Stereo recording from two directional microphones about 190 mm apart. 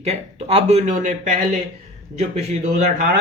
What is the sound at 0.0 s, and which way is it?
Speech, 35° right (ahead or behind).